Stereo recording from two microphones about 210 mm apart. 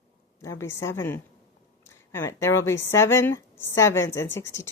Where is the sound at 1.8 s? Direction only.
15° left (ahead or behind).